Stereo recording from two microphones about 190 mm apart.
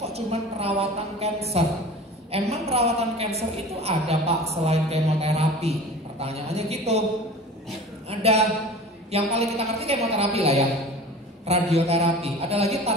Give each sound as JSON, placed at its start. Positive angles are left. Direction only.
{"t": 0.0, "sound": "a woman's voice", "side_deg": -35}
{"t": 8.1, "sound": "a woman's voice", "side_deg": -35}